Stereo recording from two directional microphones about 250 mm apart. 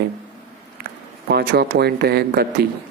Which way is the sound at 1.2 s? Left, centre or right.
Right.